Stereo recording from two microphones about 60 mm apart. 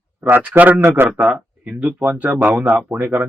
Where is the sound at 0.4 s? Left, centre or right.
Right.